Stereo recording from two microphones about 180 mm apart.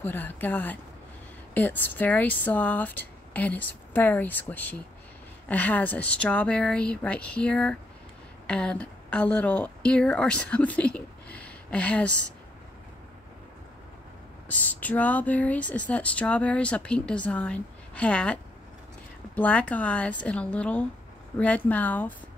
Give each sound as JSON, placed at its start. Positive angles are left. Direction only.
{"t": 0.0, "sound": "speech", "side_deg": 10}
{"t": 14.5, "sound": "speech", "side_deg": 10}